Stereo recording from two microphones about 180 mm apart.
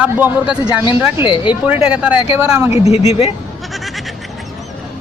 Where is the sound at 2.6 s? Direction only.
35° left (ahead or behind).